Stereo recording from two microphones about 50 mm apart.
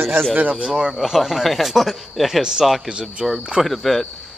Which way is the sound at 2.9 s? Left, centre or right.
Centre.